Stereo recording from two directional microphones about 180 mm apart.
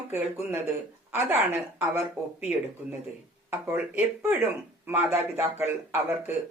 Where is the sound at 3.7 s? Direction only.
10° right (ahead or behind).